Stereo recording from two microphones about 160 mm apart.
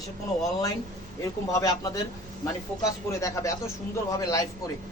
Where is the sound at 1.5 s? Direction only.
20° left (ahead or behind).